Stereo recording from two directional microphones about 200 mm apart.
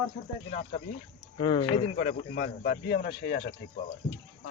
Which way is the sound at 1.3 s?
25° left (ahead or behind).